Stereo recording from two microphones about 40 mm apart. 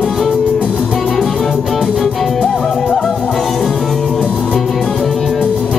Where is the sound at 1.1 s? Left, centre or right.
Centre.